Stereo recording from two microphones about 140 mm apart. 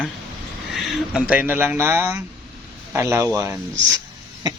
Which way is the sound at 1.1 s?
10° right (ahead or behind).